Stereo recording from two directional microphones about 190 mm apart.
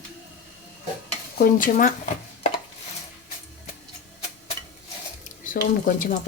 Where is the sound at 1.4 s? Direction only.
45° left (ahead or behind).